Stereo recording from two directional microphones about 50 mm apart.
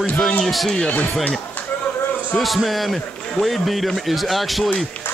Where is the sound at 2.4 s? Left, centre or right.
Centre.